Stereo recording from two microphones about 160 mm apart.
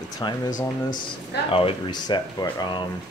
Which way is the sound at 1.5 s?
35° left (ahead or behind).